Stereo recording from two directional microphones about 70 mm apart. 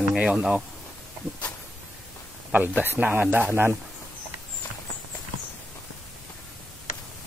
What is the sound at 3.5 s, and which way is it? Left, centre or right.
Speech, right.